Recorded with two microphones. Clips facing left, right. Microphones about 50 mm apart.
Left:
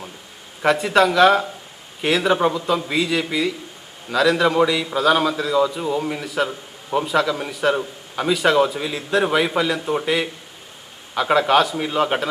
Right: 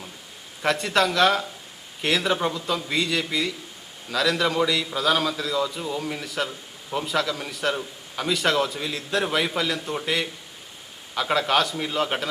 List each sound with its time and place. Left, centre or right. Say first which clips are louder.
0.6 s a man's voice: left 6 dB; centre
11.1 s a man's voice: left 6 dB; centre